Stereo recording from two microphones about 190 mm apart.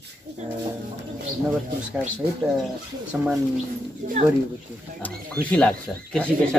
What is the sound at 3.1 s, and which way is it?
Speech, 5° right (ahead or behind).